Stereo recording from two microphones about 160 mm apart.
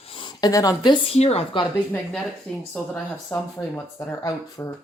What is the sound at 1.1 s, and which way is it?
Speech, 40° left (ahead or behind).